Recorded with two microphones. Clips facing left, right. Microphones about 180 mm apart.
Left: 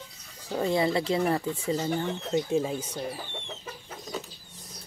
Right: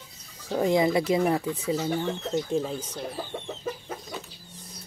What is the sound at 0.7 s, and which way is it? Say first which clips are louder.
Speech: right 3 dB; 15° right (ahead or behind).